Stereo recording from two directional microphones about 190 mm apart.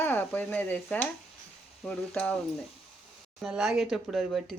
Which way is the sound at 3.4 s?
Centre (ahead or behind).